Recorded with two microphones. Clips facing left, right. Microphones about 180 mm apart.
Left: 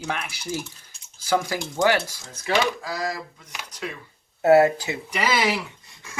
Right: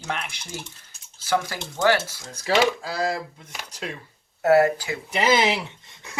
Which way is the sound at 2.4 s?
30° right (ahead or behind).